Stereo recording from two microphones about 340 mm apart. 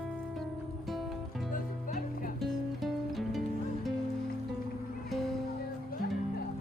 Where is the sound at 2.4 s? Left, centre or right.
Centre.